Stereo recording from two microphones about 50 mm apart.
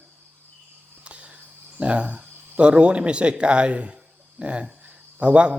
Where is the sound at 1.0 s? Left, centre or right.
Right.